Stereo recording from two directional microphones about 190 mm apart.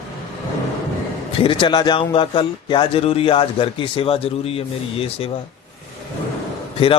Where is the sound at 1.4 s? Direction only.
25° left (ahead or behind).